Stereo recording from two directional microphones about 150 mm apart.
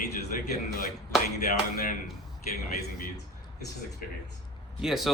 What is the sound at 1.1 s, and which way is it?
Speech, centre (ahead or behind).